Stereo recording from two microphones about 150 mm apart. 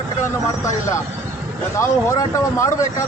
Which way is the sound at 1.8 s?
20° left (ahead or behind).